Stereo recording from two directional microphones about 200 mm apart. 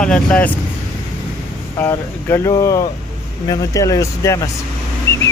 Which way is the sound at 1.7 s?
10° left (ahead or behind).